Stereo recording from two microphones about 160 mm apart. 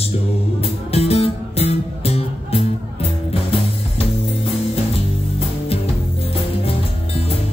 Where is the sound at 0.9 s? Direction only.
40° left (ahead or behind).